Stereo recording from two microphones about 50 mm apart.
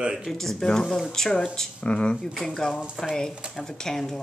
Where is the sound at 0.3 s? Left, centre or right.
Centre.